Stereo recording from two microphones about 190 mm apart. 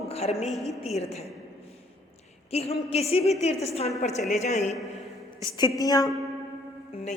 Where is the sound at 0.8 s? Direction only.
35° left (ahead or behind).